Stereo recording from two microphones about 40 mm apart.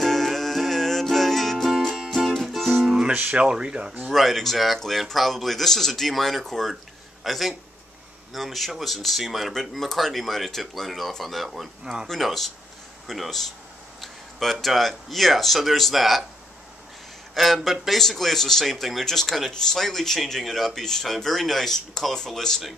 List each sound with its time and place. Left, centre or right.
0.0 s music: centre
3.3 s speech: right
4.1 s a man's voice: centre
11.8 s speech: centre
12.1 s a man's voice: centre
17.3 s a man's voice: centre